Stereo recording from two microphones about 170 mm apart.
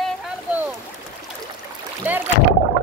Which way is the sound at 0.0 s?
5° right (ahead or behind).